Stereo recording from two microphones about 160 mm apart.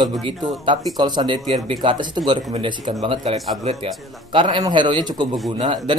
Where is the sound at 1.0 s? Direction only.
25° right (ahead or behind).